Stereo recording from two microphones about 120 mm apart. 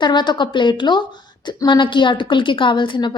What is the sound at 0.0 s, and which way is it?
A woman's voice, 40° left (ahead or behind).